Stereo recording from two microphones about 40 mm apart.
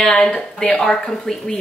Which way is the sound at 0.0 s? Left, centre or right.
Left.